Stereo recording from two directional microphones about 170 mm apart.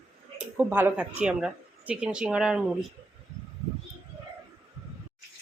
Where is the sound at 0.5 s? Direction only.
10° right (ahead or behind).